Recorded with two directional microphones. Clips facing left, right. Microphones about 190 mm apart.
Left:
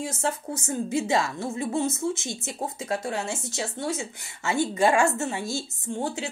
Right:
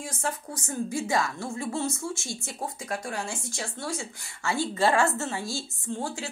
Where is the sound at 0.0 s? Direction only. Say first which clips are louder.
Left 4 dB; 25° left (ahead or behind).